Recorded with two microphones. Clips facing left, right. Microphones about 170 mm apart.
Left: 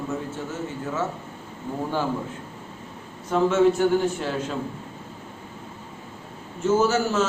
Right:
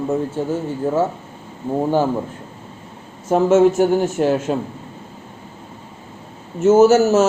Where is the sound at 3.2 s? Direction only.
45° right (ahead or behind).